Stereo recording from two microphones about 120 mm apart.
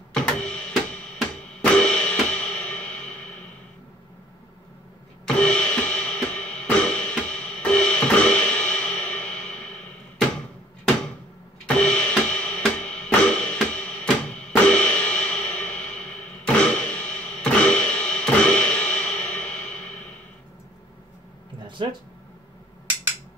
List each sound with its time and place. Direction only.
0.1 s printer: 10° left (ahead or behind)
1.6 s music: 10° left (ahead or behind)
5.2 s music: 10° left (ahead or behind)
11.6 s drum kit: 10° left (ahead or behind)
16.4 s music: 5° left (ahead or behind)
21.8 s a sound: 45° right (ahead or behind)